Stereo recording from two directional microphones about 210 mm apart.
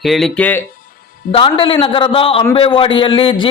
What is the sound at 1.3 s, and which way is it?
Speech, 25° left (ahead or behind).